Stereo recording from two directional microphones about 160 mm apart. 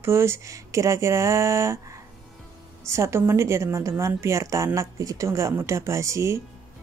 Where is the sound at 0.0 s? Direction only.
15° right (ahead or behind).